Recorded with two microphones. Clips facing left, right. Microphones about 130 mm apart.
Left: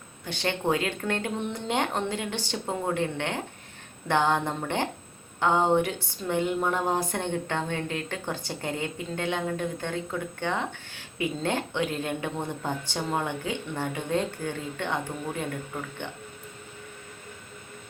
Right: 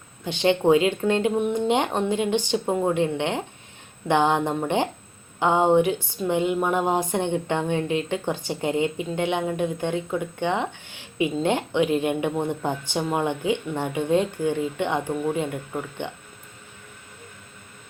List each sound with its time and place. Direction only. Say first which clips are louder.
0.3 s speech: right 8 dB; 15° right (ahead or behind)